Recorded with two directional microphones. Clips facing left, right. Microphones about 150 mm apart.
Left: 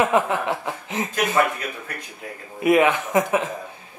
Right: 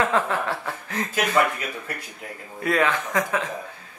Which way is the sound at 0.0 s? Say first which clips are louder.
Left 3 dB; 15° left (ahead or behind).